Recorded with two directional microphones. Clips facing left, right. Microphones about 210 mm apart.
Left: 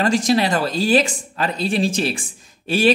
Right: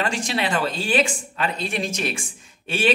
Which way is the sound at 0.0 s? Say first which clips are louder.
Left 7 dB; 40° left (ahead or behind).